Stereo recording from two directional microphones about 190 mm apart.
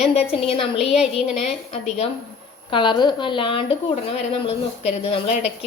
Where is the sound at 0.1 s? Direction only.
30° left (ahead or behind).